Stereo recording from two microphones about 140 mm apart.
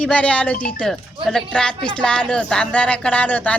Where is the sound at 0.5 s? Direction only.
90° left.